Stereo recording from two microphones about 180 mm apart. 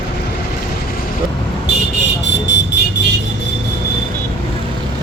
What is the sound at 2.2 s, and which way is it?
Vehicle, 75° left (ahead or behind).